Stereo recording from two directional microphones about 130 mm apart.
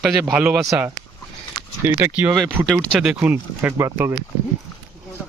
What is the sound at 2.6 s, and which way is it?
Speech, centre (ahead or behind).